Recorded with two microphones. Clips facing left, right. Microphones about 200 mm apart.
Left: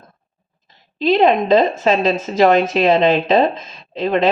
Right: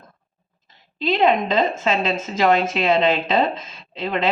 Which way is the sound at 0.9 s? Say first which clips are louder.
Left 5 dB; 35° left (ahead or behind).